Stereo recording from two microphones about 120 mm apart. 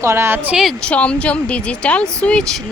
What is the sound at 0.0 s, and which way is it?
Speech, 20° right (ahead or behind).